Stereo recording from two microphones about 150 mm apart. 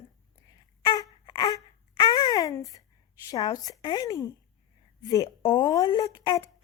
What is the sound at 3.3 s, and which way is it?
A woman's voice, 25° left (ahead or behind).